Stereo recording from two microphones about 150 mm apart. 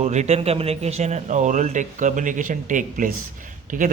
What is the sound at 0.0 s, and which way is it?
A man's voice, 45° right (ahead or behind).